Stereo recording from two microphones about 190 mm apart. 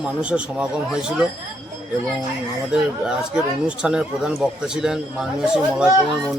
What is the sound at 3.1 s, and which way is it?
Speech, 5° right (ahead or behind).